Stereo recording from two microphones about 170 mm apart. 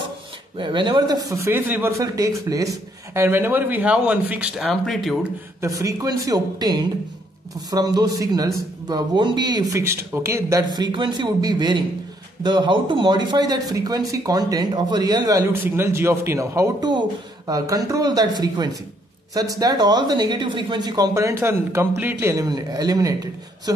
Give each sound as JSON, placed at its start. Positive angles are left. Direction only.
{"t": 0.6, "sound": "speech", "side_deg": -30}
{"t": 1.4, "sound": "a man's voice", "side_deg": -10}
{"t": 5.6, "sound": "speech", "side_deg": -20}